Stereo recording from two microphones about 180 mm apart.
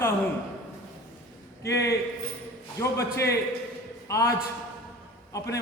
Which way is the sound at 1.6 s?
15° left (ahead or behind).